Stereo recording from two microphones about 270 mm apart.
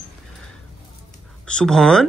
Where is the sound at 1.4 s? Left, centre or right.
Centre.